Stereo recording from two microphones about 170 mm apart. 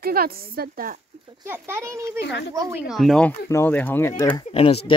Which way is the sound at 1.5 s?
15° right (ahead or behind).